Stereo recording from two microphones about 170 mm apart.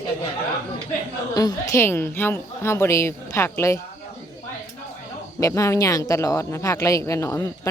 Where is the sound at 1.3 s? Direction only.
20° left (ahead or behind).